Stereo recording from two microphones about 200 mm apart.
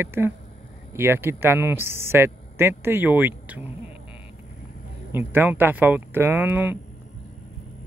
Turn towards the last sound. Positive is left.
turn(degrees=-10)  # may be behind; listen again after turning